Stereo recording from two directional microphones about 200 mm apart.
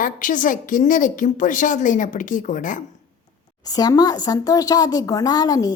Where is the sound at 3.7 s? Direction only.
20° left (ahead or behind).